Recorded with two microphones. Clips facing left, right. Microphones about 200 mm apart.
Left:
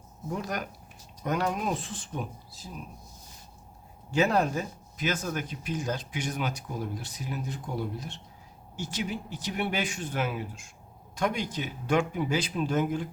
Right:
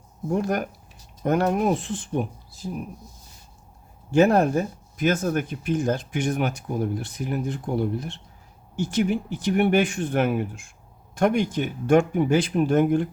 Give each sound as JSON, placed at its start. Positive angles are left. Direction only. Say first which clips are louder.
{"t": 0.3, "sound": "speech", "louder": "right 9 dB", "side_deg": -50}
{"t": 4.1, "sound": "speech", "louder": "right 7 dB", "side_deg": -50}